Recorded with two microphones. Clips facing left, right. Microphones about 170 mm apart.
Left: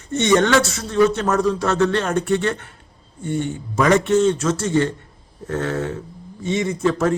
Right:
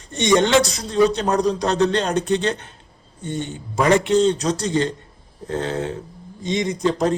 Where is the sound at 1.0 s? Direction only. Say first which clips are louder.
Even; 15° right (ahead or behind).